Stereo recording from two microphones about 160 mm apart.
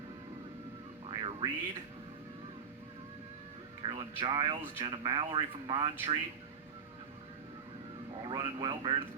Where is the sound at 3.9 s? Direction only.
35° right (ahead or behind).